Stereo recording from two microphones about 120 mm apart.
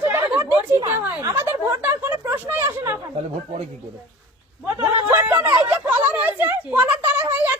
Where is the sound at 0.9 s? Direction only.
15° right (ahead or behind).